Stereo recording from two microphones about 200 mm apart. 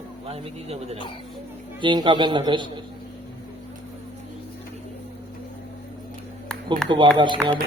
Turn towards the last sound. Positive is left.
turn(degrees=-25)  # may be behind; listen again after turning